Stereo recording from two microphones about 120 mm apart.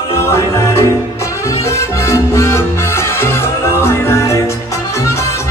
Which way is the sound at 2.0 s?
25° left (ahead or behind).